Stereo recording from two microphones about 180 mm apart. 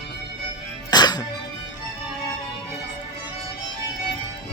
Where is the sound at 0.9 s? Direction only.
25° left (ahead or behind).